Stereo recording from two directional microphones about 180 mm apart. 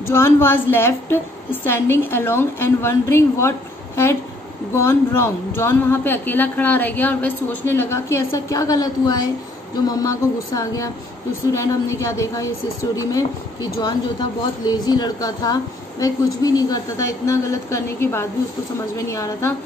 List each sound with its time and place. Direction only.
0.0 s a man's voice: 15° left (ahead or behind)